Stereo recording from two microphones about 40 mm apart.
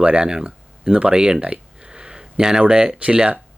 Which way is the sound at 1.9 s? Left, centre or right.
Centre.